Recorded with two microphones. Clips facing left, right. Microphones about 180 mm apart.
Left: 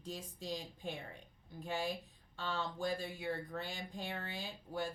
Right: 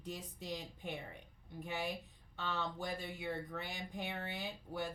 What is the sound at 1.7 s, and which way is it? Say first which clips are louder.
Speech: left 2 dB; 20° right (ahead or behind).